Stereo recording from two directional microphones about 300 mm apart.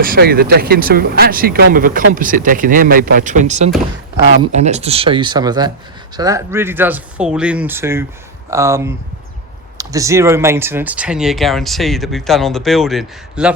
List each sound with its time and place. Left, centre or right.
0.0 s speech: right; by 13.5 s centre